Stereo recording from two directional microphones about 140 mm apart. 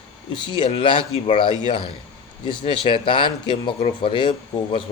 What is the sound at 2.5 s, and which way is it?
A man's voice, 35° left (ahead or behind).